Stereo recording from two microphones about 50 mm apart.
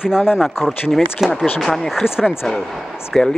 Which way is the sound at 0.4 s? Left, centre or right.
Centre.